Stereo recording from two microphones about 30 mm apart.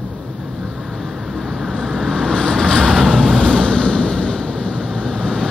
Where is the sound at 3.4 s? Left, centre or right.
Left.